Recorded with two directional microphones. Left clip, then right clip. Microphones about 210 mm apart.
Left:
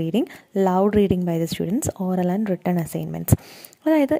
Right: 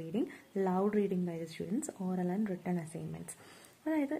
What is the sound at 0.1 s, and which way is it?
A woman's voice, 40° left (ahead or behind).